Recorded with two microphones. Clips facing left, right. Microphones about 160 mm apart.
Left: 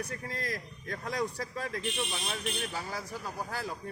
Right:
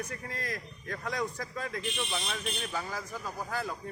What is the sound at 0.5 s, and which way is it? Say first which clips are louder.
Speech: even; 35° left (ahead or behind).